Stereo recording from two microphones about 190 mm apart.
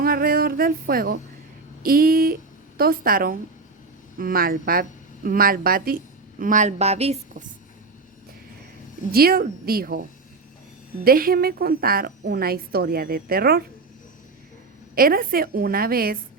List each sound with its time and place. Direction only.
0.0 s a sound: 50° right (ahead or behind)
1.8 s a woman's voice: 50° right (ahead or behind); by 7.4 s 35° right (ahead or behind)
9.1 s a woman's voice: 50° right (ahead or behind)
14.9 s a woman's voice: 50° right (ahead or behind)